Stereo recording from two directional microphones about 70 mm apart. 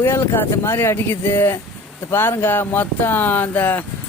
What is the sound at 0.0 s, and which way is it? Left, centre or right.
Speech, left.